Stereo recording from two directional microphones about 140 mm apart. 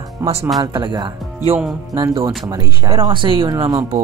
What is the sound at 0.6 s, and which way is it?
Speech, 35° right (ahead or behind).